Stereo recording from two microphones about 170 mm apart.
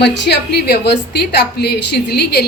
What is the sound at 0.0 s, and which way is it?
A woman's voice, 80° left.